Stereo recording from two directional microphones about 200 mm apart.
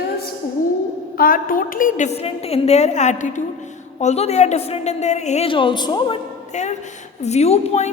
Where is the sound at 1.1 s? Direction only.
45° left (ahead or behind); by 6.2 s 20° left (ahead or behind).